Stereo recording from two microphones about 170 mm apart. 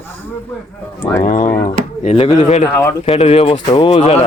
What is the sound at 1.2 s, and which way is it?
Speech, 50° left (ahead or behind).